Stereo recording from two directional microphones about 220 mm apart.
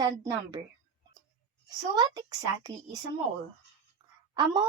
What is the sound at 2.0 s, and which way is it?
A woman's voice, 15° right (ahead or behind).